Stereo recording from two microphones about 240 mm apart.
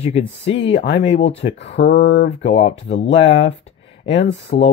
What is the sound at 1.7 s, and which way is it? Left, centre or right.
Speech, left.